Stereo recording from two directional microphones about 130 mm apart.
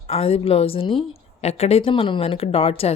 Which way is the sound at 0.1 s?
50° left (ahead or behind).